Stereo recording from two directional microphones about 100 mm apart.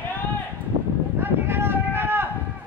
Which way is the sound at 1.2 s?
20° right (ahead or behind).